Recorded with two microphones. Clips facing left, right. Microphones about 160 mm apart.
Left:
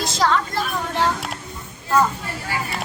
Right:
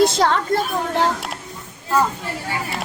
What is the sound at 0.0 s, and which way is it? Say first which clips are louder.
Speech: right 4 dB; 60° right (ahead or behind).